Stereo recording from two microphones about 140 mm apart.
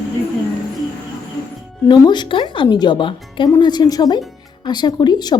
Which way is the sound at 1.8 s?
30° left (ahead or behind).